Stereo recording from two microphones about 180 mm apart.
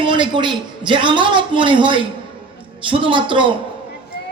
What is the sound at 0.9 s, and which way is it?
A man's voice, 25° right (ahead or behind).